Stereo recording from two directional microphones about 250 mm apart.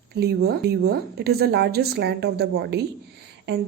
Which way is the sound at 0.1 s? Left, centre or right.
Right.